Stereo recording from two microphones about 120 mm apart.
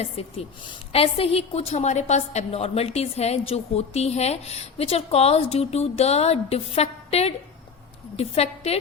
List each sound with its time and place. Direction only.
0.0 s a woman's voice: 55° left (ahead or behind)